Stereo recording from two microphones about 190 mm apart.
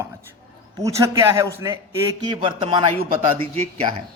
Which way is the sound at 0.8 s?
15° right (ahead or behind).